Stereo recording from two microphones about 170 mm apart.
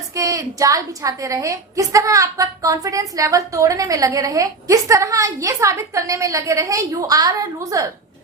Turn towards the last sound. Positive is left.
turn(degrees=-20)  # may be behind; listen again after turning